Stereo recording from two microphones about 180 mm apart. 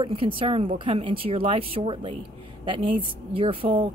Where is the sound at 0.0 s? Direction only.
30° right (ahead or behind).